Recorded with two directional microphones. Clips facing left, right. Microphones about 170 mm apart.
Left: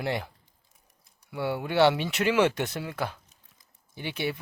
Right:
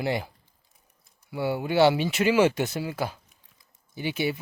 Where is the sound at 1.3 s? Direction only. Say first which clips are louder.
Right 3 dB; centre (ahead or behind).